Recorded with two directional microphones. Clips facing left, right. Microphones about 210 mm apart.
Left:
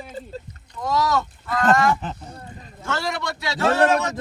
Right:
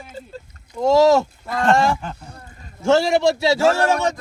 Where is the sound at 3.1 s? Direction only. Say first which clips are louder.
Right 11 dB; 25° right (ahead or behind).